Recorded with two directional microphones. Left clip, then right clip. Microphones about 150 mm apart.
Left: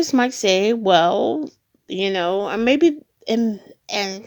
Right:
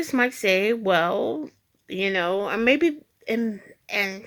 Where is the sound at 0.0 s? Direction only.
25° left (ahead or behind).